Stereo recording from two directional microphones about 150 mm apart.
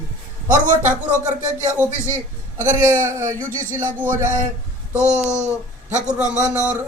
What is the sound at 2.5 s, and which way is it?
Speech, 55° right (ahead or behind).